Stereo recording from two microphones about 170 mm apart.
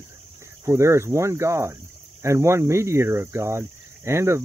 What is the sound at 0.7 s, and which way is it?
Speech, 15° right (ahead or behind).